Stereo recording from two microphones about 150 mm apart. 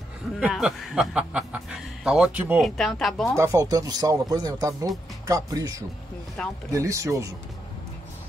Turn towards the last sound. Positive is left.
turn(degrees=-20)  # may be behind; listen again after turning